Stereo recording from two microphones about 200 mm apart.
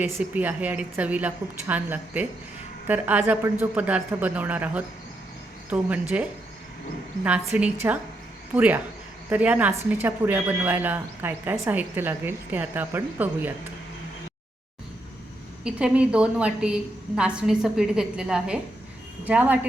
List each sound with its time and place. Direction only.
0.0 s speech: 10° right (ahead or behind)
7.3 s speech: 5° right (ahead or behind)
15.6 s a woman's voice: 5° right (ahead or behind)